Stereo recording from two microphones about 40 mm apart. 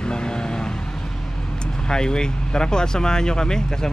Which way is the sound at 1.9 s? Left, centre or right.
Centre.